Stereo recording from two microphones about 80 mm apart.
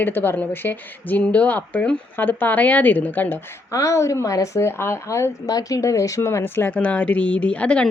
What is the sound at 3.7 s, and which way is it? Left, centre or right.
A woman's voice, left.